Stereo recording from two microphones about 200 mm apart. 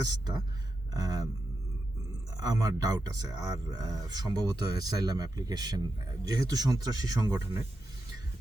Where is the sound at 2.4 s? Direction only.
20° right (ahead or behind).